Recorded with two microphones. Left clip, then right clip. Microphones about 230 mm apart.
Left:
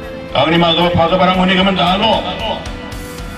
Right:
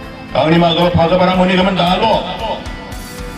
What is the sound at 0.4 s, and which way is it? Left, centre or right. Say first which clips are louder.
A man's voice: even; right.